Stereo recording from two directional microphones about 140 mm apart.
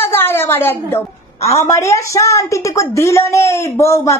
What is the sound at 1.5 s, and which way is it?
A woman's voice, 20° left (ahead or behind).